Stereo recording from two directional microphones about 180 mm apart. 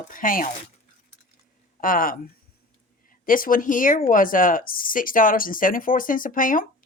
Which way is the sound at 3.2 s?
50° left (ahead or behind).